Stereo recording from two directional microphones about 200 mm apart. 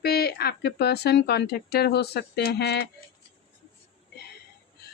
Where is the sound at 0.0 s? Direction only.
50° left (ahead or behind).